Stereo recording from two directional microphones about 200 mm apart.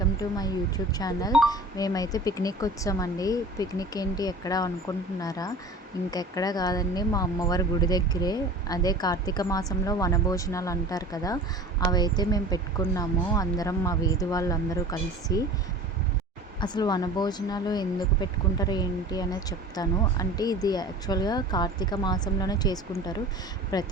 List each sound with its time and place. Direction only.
0.2 s speech: 20° left (ahead or behind)
16.6 s speech: 20° left (ahead or behind)